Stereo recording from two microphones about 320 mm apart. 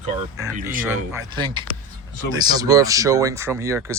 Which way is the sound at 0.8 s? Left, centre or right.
Centre.